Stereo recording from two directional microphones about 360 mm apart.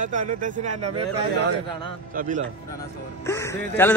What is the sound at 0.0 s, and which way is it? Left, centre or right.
Speech, right.